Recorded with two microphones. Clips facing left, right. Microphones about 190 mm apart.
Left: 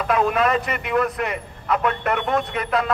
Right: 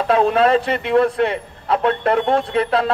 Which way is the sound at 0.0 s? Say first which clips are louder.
Right 5 dB; 30° right (ahead or behind).